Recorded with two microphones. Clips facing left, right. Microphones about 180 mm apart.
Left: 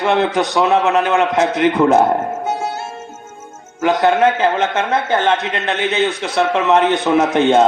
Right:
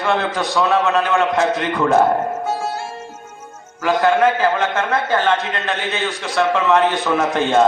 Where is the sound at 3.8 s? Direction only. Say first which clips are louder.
Left 2 dB; 20° left (ahead or behind).